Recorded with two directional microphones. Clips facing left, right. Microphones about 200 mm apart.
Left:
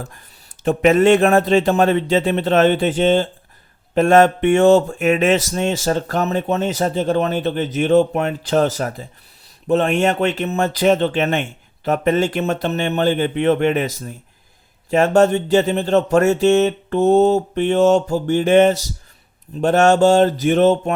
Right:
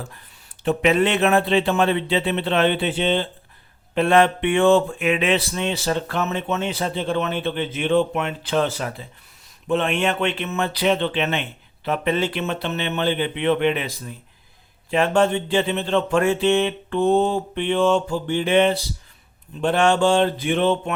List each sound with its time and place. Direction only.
0.0 s speech: 45° left (ahead or behind)